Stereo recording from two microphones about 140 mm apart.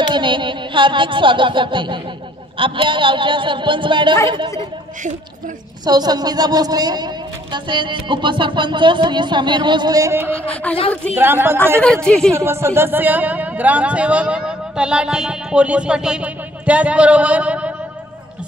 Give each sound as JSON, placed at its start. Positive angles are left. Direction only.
{"t": 0.1, "sound": "a sound", "side_deg": -35}
{"t": 2.6, "sound": "speech", "side_deg": -40}
{"t": 5.9, "sound": "a woman's voice", "side_deg": -30}
{"t": 10.4, "sound": "speech", "side_deg": 10}
{"t": 11.1, "sound": "speech", "side_deg": -15}
{"t": 11.8, "sound": "a woman's voice", "side_deg": 5}
{"t": 12.4, "sound": "speech", "side_deg": -20}